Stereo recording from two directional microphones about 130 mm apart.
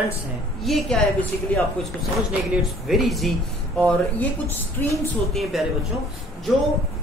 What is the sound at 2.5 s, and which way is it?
Speech, centre (ahead or behind).